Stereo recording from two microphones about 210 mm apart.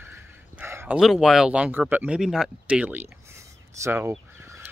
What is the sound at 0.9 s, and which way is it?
Speech, centre (ahead or behind).